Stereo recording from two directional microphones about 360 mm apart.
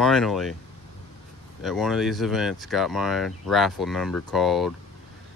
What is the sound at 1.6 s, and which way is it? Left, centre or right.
Speech, centre.